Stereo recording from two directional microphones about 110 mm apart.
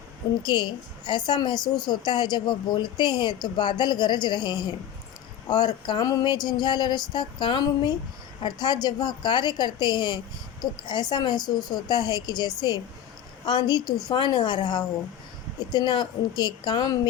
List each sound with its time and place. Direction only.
0.4 s a woman's voice: 40° left (ahead or behind)